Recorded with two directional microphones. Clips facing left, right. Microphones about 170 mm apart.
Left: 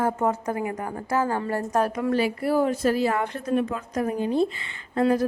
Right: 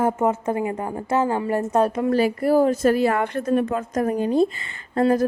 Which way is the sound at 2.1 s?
40° right (ahead or behind).